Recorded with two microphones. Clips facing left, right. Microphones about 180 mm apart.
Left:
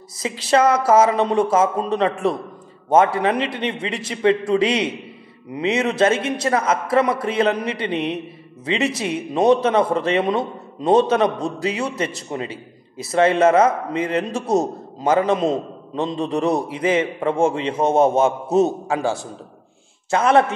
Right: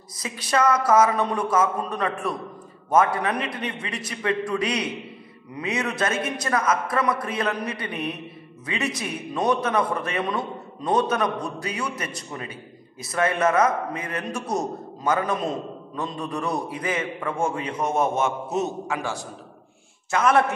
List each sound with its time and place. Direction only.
0.2 s a man's voice: 25° left (ahead or behind)